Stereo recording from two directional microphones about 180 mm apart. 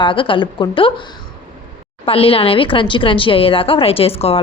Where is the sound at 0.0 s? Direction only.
30° left (ahead or behind).